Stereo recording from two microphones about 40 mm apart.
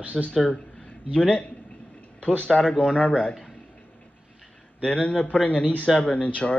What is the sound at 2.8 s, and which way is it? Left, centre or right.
Speech, centre.